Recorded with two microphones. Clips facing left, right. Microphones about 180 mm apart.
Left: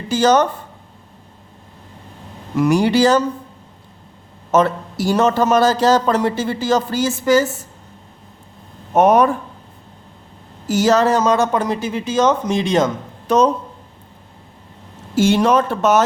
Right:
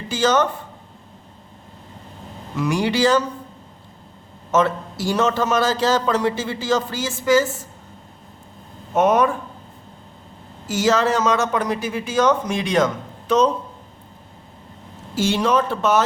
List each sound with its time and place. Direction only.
0.1 s a man's voice: 40° left (ahead or behind)
2.6 s a man's voice: 40° left (ahead or behind)
4.5 s a man's voice: 40° left (ahead or behind)
9.0 s a man's voice: 35° left (ahead or behind)
10.7 s speech: 40° left (ahead or behind)
13.2 s speech: 40° left (ahead or behind)
15.1 s speech: 50° left (ahead or behind)